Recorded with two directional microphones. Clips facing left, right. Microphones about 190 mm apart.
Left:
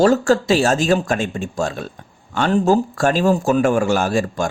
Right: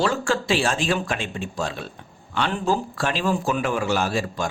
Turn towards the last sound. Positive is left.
turn(degrees=50)  # may be behind; listen again after turning